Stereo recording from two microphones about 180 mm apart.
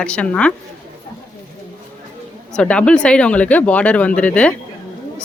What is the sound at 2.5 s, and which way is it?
Speech, 5° left (ahead or behind).